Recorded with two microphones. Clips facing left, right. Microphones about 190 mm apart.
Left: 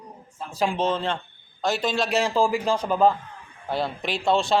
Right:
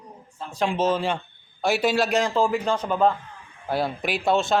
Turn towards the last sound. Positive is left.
turn(degrees=0)  # may be behind; listen again after turning